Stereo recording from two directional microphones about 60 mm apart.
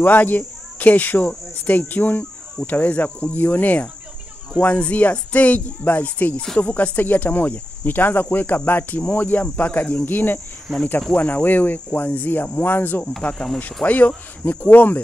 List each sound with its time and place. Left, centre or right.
0.0 s speech: left